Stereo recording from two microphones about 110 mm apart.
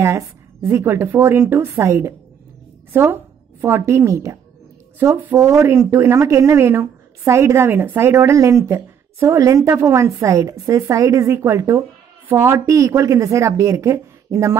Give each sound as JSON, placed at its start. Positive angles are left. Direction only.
{"t": 0.0, "sound": "a woman's voice", "side_deg": -25}